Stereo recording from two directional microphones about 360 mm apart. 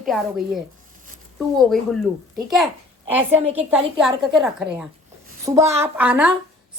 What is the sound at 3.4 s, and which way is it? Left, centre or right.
Speech, centre.